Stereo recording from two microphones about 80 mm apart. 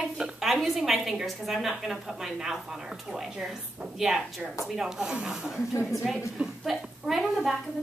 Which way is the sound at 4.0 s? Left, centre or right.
Centre.